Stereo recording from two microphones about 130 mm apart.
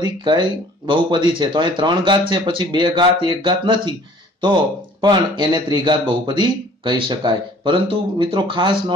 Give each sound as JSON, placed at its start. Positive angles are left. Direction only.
{"t": 0.0, "sound": "speech", "side_deg": -35}